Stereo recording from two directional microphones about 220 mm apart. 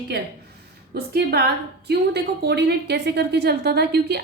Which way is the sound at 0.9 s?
45° right (ahead or behind).